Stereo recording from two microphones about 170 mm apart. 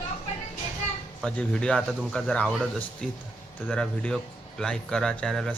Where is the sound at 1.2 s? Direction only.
5° left (ahead or behind).